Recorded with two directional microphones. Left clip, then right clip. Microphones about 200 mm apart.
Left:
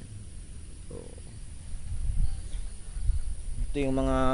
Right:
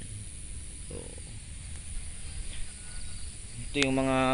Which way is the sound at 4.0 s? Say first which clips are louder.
Left 1 dB; 10° left (ahead or behind).